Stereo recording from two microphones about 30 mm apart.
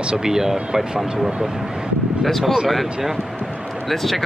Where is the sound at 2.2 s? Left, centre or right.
Centre.